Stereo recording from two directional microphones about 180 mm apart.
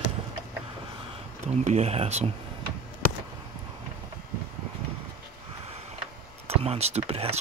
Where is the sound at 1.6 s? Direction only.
35° right (ahead or behind).